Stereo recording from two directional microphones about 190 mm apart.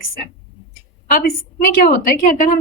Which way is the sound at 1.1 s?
50° left (ahead or behind).